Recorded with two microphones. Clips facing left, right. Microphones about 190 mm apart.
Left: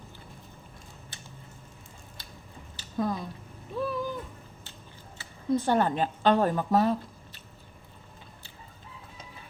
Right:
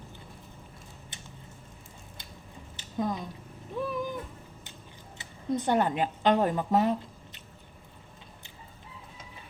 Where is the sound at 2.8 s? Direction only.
20° right (ahead or behind).